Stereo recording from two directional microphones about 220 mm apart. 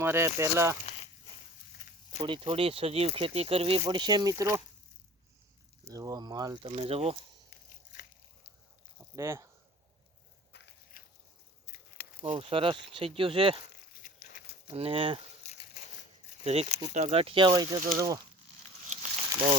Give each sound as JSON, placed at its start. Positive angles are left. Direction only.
{"t": 0.0, "sound": "speech", "side_deg": -10}
{"t": 2.0, "sound": "speech", "side_deg": -20}
{"t": 5.9, "sound": "speech", "side_deg": -15}
{"t": 9.1, "sound": "speech", "side_deg": -15}
{"t": 10.5, "sound": "biting", "side_deg": 50}
{"t": 11.6, "sound": "a sound", "side_deg": 50}
{"t": 12.2, "sound": "speech", "side_deg": -25}
{"t": 13.9, "sound": "a sound", "side_deg": 45}
{"t": 14.7, "sound": "speech", "side_deg": -25}
{"t": 16.4, "sound": "speech", "side_deg": -30}
{"t": 18.9, "sound": "a sound", "side_deg": -30}